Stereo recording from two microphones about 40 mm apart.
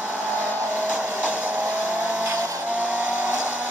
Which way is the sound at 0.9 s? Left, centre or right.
Right.